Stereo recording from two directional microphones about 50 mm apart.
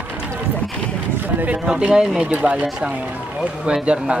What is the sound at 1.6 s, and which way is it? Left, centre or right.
Speech, centre.